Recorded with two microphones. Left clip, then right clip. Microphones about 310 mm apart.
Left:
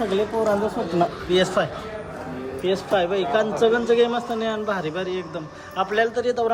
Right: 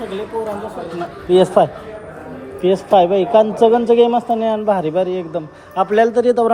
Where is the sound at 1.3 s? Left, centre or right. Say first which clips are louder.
Right 11 dB; centre.